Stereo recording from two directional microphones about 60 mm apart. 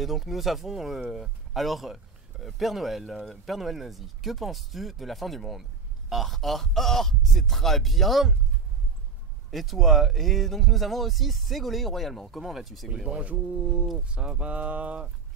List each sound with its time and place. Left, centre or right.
0.0 s speech: centre
9.5 s speech: centre
13.2 s speech: right